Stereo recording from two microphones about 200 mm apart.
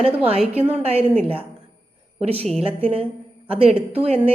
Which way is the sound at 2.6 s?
30° right (ahead or behind).